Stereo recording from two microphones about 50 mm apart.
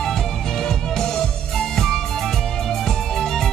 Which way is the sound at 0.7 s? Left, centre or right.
Centre.